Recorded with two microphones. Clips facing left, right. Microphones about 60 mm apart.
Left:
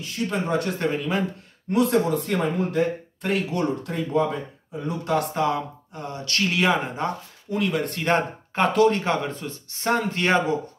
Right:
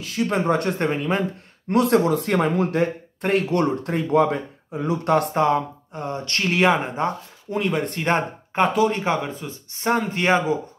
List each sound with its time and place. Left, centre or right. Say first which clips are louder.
0.3 s speech: right 4 dB; right
1.7 s speech: right 3 dB; right
2.7 s speech: right 1 dB; right
3.8 s speech: right 4 dB; right
5.1 s speech: right 4 dB; right
8.7 s speech: left 1 dB; centre